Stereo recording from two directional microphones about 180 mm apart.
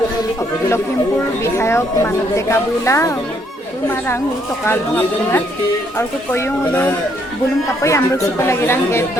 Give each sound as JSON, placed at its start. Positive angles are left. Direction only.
{"t": 1.5, "sound": "a woman's voice", "side_deg": 15}
{"t": 4.6, "sound": "a woman's voice", "side_deg": 15}